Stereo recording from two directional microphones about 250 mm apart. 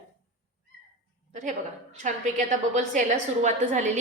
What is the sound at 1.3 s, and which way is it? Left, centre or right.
A woman's voice, right.